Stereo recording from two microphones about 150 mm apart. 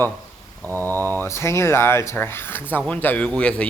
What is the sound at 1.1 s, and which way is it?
Speech, 15° left (ahead or behind).